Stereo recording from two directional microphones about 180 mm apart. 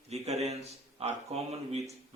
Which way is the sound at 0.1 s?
35° right (ahead or behind).